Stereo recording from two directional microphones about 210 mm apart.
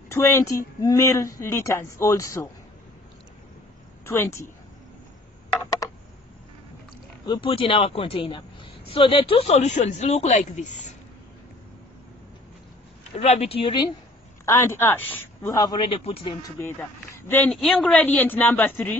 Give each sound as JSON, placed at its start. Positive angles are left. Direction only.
{"t": 0.1, "sound": "speech", "side_deg": 15}
{"t": 4.0, "sound": "speech", "side_deg": 10}
{"t": 5.8, "sound": "a sound", "side_deg": 15}
{"t": 7.2, "sound": "speech", "side_deg": 25}
{"t": 13.2, "sound": "speech", "side_deg": 30}
{"t": 14.4, "sound": "speech", "side_deg": 10}